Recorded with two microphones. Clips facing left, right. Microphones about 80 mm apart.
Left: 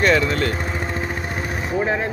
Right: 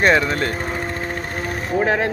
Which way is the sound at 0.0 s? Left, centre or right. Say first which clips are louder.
Right 1 dB; right.